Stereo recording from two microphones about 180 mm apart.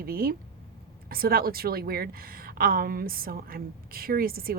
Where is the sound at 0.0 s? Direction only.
55° right (ahead or behind).